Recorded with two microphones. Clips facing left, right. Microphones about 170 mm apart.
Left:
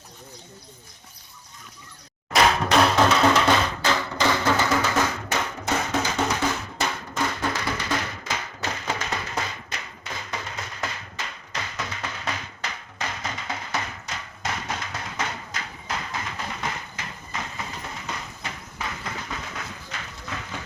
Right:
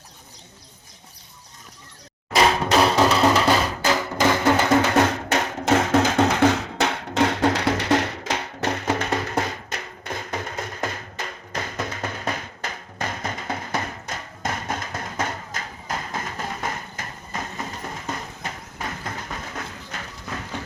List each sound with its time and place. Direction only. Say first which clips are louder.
2.3 s music: right 1 dB; centre (ahead or behind); by 4.7 s 20° right (ahead or behind)
4.9 s music: right 5 dB; 65° right (ahead or behind); by 20.0 s 45° right (ahead or behind)